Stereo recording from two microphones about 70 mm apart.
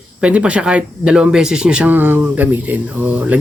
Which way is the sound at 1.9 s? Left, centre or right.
Right.